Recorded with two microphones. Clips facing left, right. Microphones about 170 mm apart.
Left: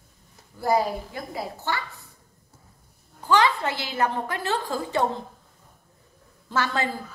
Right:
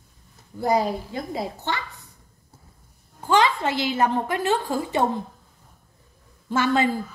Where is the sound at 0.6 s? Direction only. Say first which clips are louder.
Right 1 dB; 20° right (ahead or behind).